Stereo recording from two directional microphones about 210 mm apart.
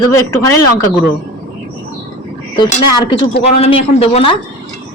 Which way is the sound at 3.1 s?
30° left (ahead or behind).